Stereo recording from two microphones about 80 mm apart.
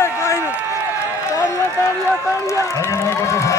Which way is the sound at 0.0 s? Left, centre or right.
Left.